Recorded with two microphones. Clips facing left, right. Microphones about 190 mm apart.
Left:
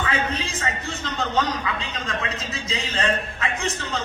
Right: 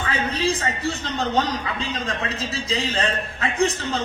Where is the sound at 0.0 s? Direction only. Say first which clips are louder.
Right 2 dB; 35° right (ahead or behind).